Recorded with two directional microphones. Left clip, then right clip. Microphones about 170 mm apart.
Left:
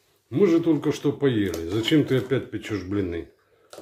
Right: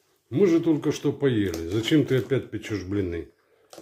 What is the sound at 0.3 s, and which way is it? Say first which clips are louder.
Speech: left 1 dB; 15° right (ahead or behind).